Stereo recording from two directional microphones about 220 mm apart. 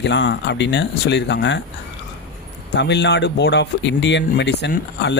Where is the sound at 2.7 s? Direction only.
50° left (ahead or behind).